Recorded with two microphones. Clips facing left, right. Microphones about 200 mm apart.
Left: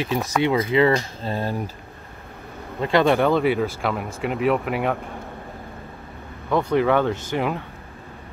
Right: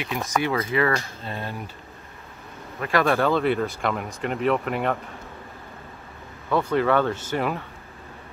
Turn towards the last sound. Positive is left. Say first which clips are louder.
# left 2 dB
turn(degrees=15)  # may be behind; listen again after turning